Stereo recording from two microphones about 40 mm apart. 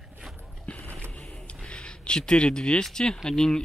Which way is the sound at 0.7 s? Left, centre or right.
Left.